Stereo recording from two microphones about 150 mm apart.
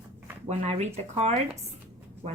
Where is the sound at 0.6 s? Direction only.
45° right (ahead or behind).